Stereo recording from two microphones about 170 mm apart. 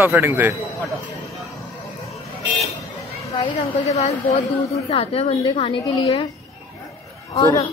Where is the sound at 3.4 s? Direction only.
35° left (ahead or behind).